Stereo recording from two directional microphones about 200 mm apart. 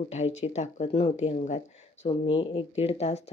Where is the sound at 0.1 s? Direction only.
35° left (ahead or behind).